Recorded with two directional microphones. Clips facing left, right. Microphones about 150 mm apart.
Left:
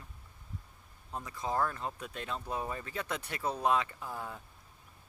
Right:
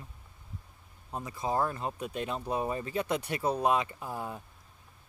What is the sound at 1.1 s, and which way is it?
Speech, 20° right (ahead or behind).